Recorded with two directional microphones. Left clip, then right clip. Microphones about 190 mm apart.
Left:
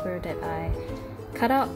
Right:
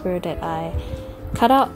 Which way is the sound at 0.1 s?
25° right (ahead or behind).